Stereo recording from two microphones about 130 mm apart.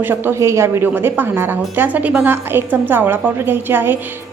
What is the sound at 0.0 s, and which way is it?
A woman's voice, 15° right (ahead or behind).